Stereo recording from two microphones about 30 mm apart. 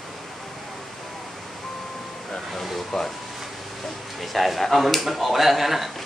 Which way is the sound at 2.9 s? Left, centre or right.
Centre.